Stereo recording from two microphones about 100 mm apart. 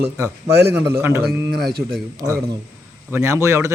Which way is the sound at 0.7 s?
20° right (ahead or behind).